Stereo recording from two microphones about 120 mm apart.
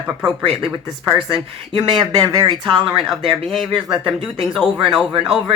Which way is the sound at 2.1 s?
30° right (ahead or behind).